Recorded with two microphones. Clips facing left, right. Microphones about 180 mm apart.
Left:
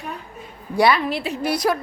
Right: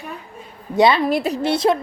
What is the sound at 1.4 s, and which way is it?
Speech, 25° right (ahead or behind).